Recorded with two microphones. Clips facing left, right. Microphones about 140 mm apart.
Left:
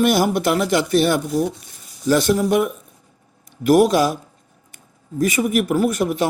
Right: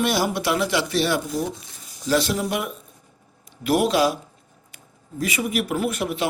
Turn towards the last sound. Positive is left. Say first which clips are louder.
# left 6 dB
turn(degrees=45)  # may be behind; listen again after turning